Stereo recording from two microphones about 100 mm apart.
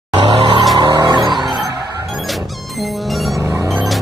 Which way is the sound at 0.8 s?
40° right (ahead or behind).